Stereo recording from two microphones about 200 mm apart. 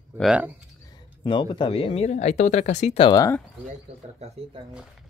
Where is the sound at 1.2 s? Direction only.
25° left (ahead or behind).